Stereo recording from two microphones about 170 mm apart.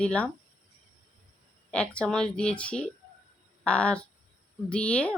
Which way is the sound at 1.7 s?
5° left (ahead or behind).